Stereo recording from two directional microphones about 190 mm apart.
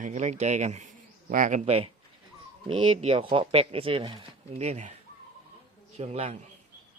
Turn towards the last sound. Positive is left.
turn(degrees=-35)  # may be behind; listen again after turning